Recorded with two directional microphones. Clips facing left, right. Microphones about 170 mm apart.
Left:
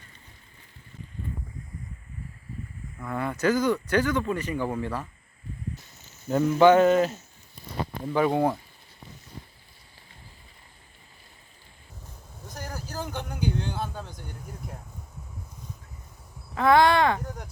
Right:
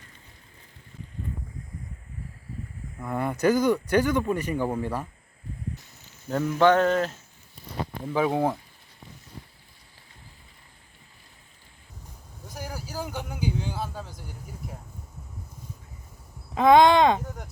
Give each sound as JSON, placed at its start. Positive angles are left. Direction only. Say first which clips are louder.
{"t": 3.0, "sound": "speech", "louder": "right 2 dB", "side_deg": -15}
{"t": 6.2, "sound": "speech", "louder": "left 3 dB", "side_deg": 5}
{"t": 12.5, "sound": "a sound", "louder": "right 1 dB", "side_deg": -10}
{"t": 16.6, "sound": "speech", "louder": "right 3 dB", "side_deg": -20}
{"t": 17.2, "sound": "speech", "louder": "left 1 dB", "side_deg": 0}